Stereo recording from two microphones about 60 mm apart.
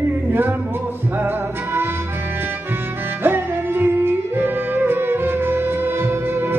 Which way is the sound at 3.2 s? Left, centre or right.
Right.